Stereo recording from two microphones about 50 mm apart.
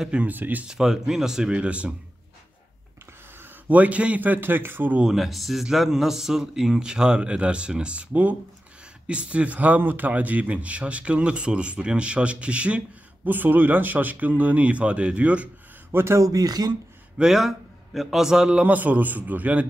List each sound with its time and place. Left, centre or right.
0.2 s speech: right
0.7 s speech: centre
3.6 s speech: right
5.0 s a man's voice: centre; by 13.3 s right
13.3 s speech: right
15.9 s speech: right
17.2 s a man's voice: centre
18.5 s speech: right